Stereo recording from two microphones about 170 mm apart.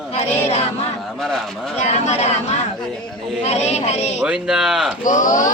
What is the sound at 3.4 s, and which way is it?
Speech, 40° left (ahead or behind).